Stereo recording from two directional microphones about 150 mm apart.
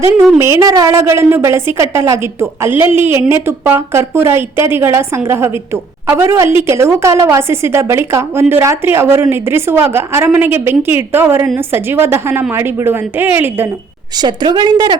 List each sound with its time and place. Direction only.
0.3 s a woman's voice: 20° right (ahead or behind)
14.2 s speech: 30° right (ahead or behind)